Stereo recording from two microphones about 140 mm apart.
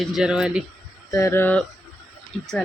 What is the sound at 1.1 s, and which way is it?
Speech, 25° left (ahead or behind).